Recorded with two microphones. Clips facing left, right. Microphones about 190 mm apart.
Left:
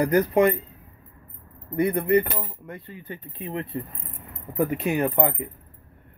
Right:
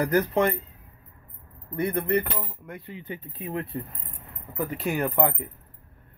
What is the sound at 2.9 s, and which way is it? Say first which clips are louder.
Speech: right 4 dB; 20° right (ahead or behind).